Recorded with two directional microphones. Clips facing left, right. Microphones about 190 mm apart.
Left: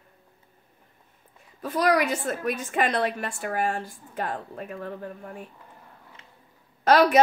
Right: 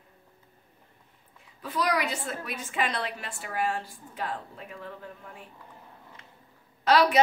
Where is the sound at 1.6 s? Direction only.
45° left (ahead or behind).